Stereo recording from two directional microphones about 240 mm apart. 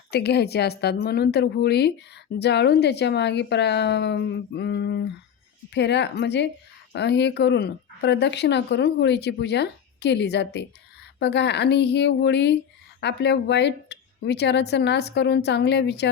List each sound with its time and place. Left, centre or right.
0.1 s a woman's voice: left